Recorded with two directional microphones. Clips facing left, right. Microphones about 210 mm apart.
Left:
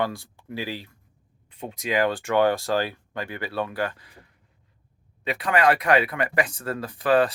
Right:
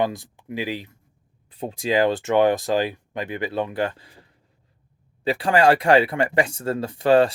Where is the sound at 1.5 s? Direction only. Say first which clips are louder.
Right 4 dB; 35° right (ahead or behind).